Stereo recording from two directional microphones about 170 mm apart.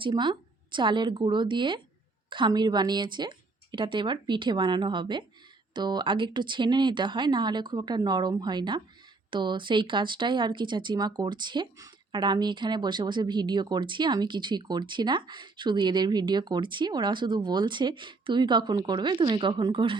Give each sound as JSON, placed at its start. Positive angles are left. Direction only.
{"t": 0.0, "sound": "speech", "side_deg": -25}